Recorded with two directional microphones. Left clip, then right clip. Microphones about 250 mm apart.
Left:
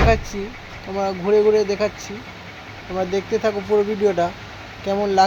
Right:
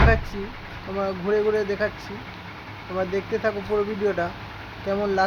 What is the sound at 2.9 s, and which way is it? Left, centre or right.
Speech, centre.